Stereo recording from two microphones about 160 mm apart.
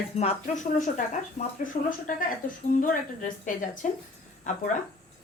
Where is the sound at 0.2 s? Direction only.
45° left (ahead or behind).